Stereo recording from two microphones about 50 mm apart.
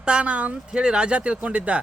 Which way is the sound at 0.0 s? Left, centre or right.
Right.